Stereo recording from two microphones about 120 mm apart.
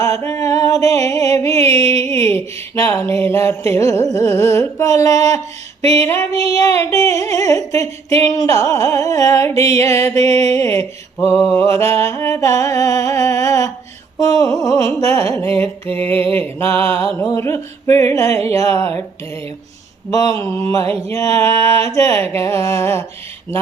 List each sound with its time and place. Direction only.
0.0 s music: 25° left (ahead or behind)
1.6 s a sound: 65° right (ahead or behind)
2.3 s music: 20° left (ahead or behind)
5.8 s female singing: 60° right (ahead or behind)
6.5 s music: 25° left (ahead or behind)
20.1 s a sound: 30° left (ahead or behind)
20.3 s music: 20° left (ahead or behind)